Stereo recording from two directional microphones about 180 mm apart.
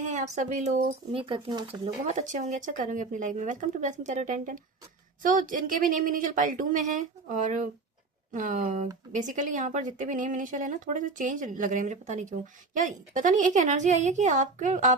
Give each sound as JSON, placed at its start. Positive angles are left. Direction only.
{"t": 0.1, "sound": "a woman's voice", "side_deg": -40}